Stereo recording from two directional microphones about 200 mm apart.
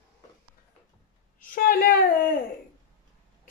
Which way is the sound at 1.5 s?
45° left (ahead or behind).